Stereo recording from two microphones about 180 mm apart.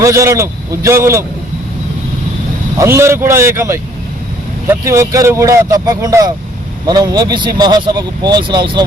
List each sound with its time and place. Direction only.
0.0 s speech: 15° right (ahead or behind)
2.7 s speech: 15° right (ahead or behind)